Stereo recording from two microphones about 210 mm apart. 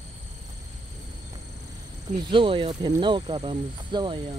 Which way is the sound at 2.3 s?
25° right (ahead or behind).